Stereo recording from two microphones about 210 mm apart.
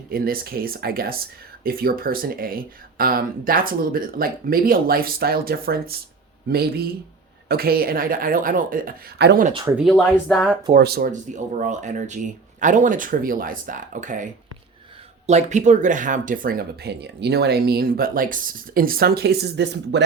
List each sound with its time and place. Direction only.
0.1 s speech: 45° right (ahead or behind)
9.6 s speech: 5° right (ahead or behind)
9.9 s speech: 10° left (ahead or behind)
10.7 s speech: 45° right (ahead or behind)
15.3 s speech: 35° right (ahead or behind); by 20.1 s 55° right (ahead or behind)